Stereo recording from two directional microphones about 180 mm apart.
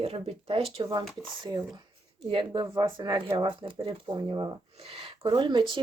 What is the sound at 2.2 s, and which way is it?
Speech, 25° right (ahead or behind).